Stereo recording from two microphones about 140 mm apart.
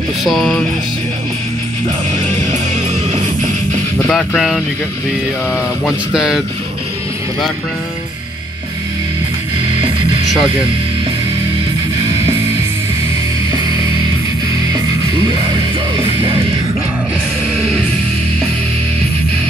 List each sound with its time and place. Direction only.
0.2 s speech: centre (ahead or behind)
2.1 s music: 55° right (ahead or behind)
4.1 s speech: centre (ahead or behind)